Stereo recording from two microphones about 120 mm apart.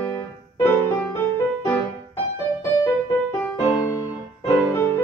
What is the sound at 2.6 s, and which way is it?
Music, 30° left (ahead or behind).